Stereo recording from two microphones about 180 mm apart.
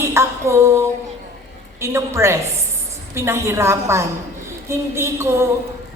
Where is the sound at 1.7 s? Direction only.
15° right (ahead or behind).